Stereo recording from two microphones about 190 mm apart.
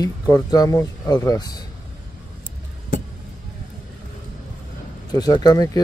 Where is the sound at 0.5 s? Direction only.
20° left (ahead or behind).